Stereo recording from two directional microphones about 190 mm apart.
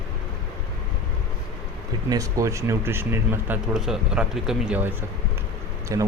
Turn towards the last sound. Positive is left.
turn(degrees=-15)  # may be behind; listen again after turning